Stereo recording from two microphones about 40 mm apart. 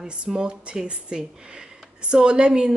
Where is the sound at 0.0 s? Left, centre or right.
Centre.